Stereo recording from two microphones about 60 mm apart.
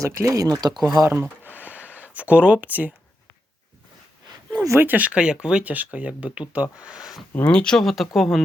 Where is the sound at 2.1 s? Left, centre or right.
Right.